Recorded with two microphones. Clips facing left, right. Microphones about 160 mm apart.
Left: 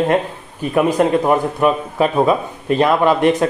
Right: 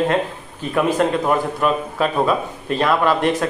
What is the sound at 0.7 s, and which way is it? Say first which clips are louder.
A man's voice: left 3 dB; 15° left (ahead or behind).